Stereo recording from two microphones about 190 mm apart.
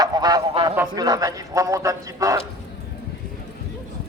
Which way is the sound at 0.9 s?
20° right (ahead or behind).